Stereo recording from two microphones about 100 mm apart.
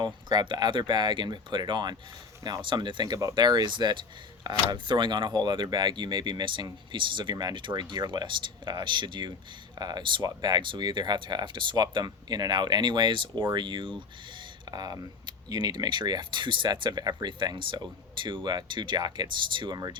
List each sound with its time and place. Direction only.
0.0 s speech: 45° right (ahead or behind)